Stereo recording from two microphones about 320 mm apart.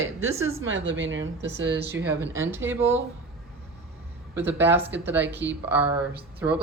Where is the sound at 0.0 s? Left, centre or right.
Right.